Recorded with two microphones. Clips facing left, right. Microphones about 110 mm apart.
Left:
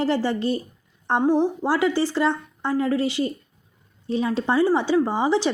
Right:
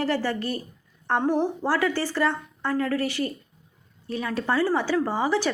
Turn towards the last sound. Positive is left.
turn(degrees=20)  # may be behind; listen again after turning